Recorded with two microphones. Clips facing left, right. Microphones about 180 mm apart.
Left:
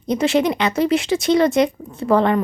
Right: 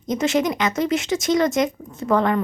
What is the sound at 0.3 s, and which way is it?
Speech, 25° left (ahead or behind).